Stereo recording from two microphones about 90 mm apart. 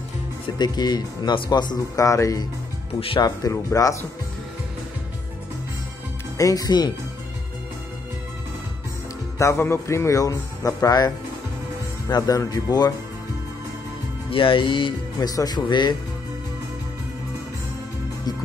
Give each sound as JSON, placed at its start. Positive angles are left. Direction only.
{"t": 0.6, "sound": "speech", "side_deg": 50}
{"t": 2.0, "sound": "a man's voice", "side_deg": 35}
{"t": 6.3, "sound": "speech", "side_deg": 40}
{"t": 9.4, "sound": "a man's voice", "side_deg": 30}
{"t": 12.2, "sound": "speech", "side_deg": 40}
{"t": 14.3, "sound": "speech", "side_deg": 70}
{"t": 15.1, "sound": "speech", "side_deg": 45}